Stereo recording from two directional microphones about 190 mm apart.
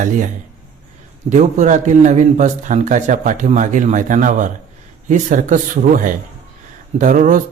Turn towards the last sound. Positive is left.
turn(degrees=-45)  # may be behind; listen again after turning